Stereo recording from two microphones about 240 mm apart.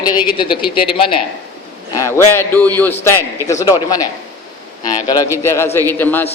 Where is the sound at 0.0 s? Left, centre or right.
Centre.